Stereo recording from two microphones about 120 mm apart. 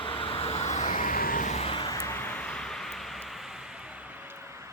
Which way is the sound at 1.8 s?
30° left (ahead or behind).